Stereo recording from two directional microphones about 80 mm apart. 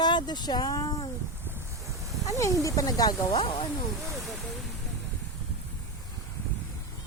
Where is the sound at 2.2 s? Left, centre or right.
Left.